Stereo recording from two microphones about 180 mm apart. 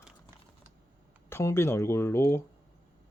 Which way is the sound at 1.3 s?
15° left (ahead or behind).